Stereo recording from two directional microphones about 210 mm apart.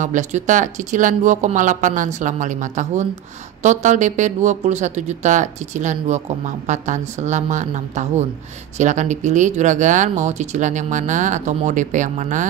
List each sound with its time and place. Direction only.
0.0 s speech: 35° right (ahead or behind)